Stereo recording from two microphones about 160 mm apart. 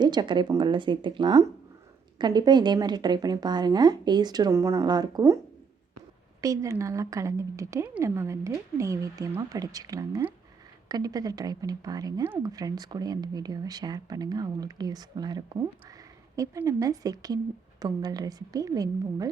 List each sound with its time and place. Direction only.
0.0 s speech: 25° right (ahead or behind)
6.4 s speech: 20° right (ahead or behind)